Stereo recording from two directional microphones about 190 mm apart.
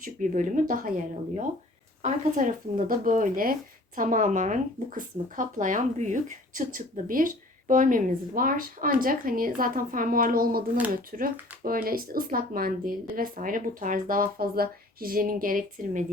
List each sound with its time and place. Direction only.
0.0 s speech: 45° right (ahead or behind)